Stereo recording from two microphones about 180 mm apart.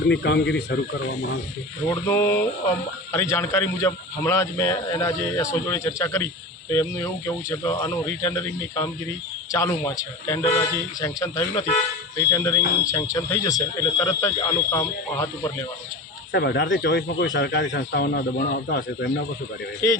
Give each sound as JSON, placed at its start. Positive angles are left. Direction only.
{"t": 0.1, "sound": "speech", "side_deg": 70}
{"t": 1.9, "sound": "speech", "side_deg": 15}
{"t": 16.3, "sound": "speech", "side_deg": 70}